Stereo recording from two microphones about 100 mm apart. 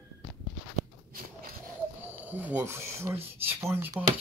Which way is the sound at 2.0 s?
20° right (ahead or behind).